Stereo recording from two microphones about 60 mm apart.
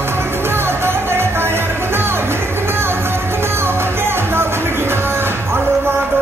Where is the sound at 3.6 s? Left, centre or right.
Right.